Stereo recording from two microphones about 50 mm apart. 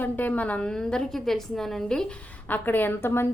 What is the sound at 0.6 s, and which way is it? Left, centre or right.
A woman's voice, centre.